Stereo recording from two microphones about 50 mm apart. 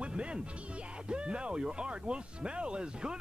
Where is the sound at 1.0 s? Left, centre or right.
Centre.